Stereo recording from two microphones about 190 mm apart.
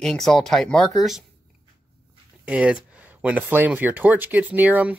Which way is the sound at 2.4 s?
5° right (ahead or behind).